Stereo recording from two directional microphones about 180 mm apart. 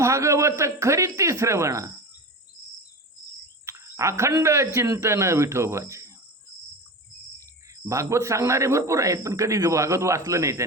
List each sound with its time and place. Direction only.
0.0 s a man's voice: 15° right (ahead or behind)
3.7 s a man's voice: 15° right (ahead or behind)
7.9 s a man's voice: 15° right (ahead or behind)